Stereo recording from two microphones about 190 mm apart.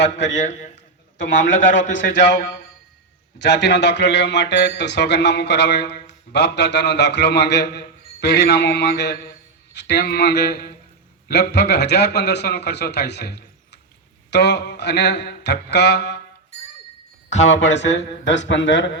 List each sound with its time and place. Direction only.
0.0 s speech: 65° left (ahead or behind)
0.3 s a man's voice: 40° left (ahead or behind)
1.9 s speech: 65° left (ahead or behind)
17.2 s a man's voice: 35° left (ahead or behind)
17.9 s speech: 70° left (ahead or behind)